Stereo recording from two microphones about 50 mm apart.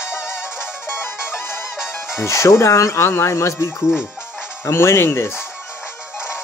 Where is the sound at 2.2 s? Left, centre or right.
Left.